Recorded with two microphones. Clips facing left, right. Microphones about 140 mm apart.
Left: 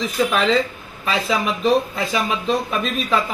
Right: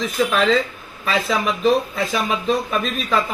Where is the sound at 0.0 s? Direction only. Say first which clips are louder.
Even; centre (ahead or behind).